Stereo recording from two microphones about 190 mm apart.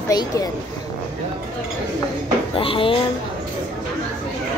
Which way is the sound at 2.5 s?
30° left (ahead or behind).